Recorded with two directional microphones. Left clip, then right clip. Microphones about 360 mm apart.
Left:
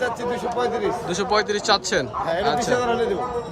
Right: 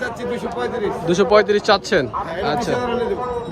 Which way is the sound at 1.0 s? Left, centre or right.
Centre.